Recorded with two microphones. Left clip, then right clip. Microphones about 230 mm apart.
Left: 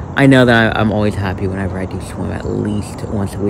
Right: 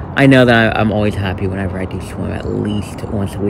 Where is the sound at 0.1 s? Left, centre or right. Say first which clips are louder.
Even; centre.